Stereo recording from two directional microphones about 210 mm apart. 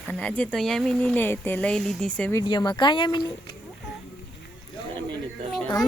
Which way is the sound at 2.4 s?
20° left (ahead or behind).